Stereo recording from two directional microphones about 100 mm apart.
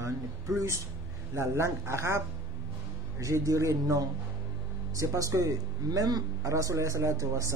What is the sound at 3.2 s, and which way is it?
Speech, 30° right (ahead or behind).